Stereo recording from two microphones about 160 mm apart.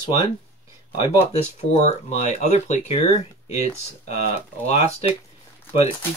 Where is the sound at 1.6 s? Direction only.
45° left (ahead or behind).